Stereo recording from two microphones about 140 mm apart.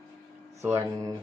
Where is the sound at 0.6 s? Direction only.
20° right (ahead or behind).